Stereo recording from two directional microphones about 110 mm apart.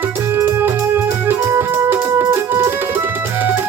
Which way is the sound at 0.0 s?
20° right (ahead or behind).